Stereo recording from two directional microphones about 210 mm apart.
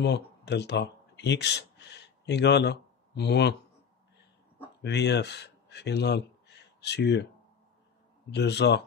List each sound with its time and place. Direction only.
0.0 s speech: 55° left (ahead or behind)
4.8 s speech: 55° left (ahead or behind)
8.3 s speech: 55° left (ahead or behind)